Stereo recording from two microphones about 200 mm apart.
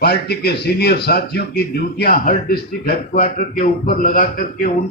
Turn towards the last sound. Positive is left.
turn(degrees=45)  # may be behind; listen again after turning